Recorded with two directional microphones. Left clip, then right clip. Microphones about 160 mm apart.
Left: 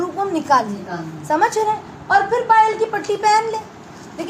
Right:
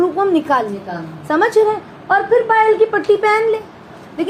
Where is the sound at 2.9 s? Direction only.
20° right (ahead or behind).